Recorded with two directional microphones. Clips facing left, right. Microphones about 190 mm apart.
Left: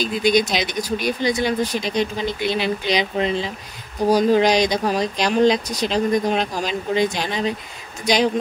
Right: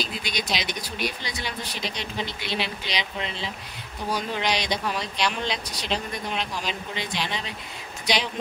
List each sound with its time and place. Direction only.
0.0 s speech: 45° left (ahead or behind)